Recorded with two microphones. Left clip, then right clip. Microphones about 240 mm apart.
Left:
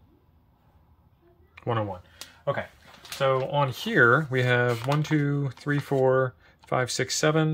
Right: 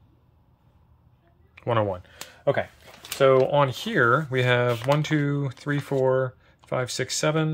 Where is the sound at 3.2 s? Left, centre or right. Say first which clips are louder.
Right 6 dB; right.